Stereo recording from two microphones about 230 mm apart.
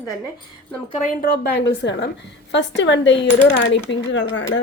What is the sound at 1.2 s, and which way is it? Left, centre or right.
Speech, left.